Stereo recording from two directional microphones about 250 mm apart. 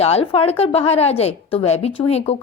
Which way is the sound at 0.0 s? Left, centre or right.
Left.